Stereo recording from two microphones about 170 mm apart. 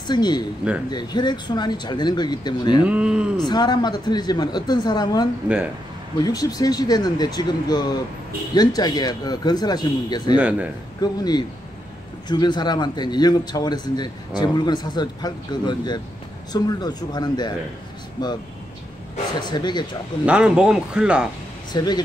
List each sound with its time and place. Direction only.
0.0 s a man's voice: 25° left (ahead or behind)
2.8 s speech: 5° right (ahead or behind)
3.3 s a man's voice: 25° left (ahead or behind)
10.3 s speech: 5° right (ahead or behind)
11.0 s a man's voice: 25° left (ahead or behind)
19.4 s a man's voice: 25° left (ahead or behind)
20.2 s speech: 5° right (ahead or behind)
21.7 s a man's voice: 25° left (ahead or behind)